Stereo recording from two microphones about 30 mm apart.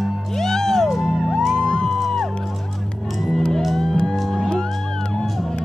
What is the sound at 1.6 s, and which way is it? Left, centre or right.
Music, left.